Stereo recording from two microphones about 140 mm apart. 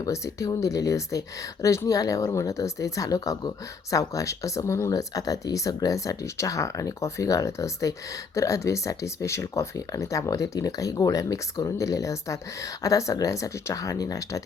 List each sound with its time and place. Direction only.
0.0 s speech: 25° left (ahead or behind)